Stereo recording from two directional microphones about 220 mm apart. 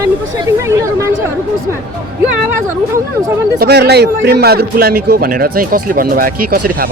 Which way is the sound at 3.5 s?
50° right (ahead or behind).